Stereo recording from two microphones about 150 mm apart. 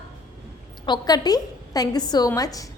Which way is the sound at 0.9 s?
25° left (ahead or behind).